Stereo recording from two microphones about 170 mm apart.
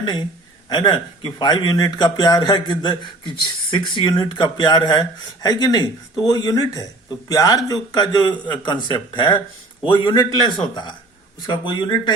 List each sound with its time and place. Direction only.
0.0 s a man's voice: 25° left (ahead or behind)
11.4 s speech: 25° left (ahead or behind)